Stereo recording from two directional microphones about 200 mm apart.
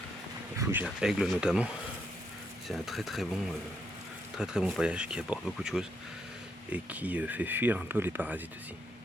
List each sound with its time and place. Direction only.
0.5 s speech: 15° right (ahead or behind)
4.4 s speech: 5° right (ahead or behind)